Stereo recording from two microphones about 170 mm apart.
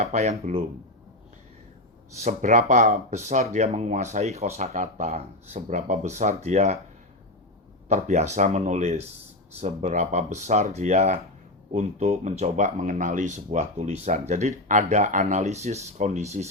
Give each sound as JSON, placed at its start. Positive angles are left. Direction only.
{"t": 0.0, "sound": "speech", "side_deg": -45}
{"t": 2.1, "sound": "speech", "side_deg": -45}
{"t": 7.9, "sound": "speech", "side_deg": -45}